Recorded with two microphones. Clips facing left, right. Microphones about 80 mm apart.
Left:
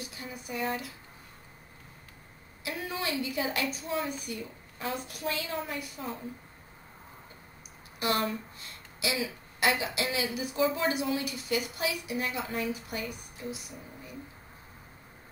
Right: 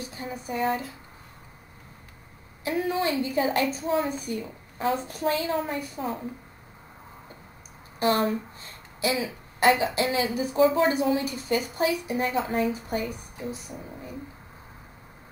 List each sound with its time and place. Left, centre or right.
0.1 s a woman's voice: right
2.6 s a woman's voice: right
8.0 s a woman's voice: right